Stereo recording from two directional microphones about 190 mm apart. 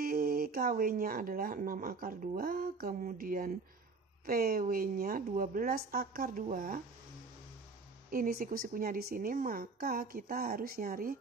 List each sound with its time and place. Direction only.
0.0 s speech: 50° right (ahead or behind)
8.1 s speech: 50° right (ahead or behind)